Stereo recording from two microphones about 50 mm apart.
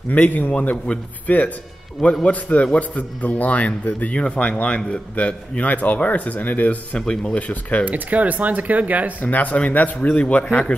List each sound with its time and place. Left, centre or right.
0.1 s speech: left
0.5 s a man's voice: left
7.0 s a man's voice: centre
7.8 s speech: right
9.2 s speech: left